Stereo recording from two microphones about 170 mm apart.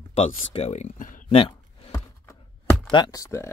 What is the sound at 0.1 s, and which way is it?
Speech, 35° left (ahead or behind).